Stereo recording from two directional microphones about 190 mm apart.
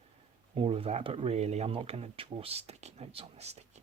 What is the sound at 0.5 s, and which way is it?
Speech, 30° right (ahead or behind).